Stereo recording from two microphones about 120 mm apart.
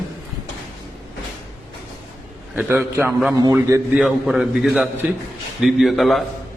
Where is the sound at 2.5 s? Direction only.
15° right (ahead or behind).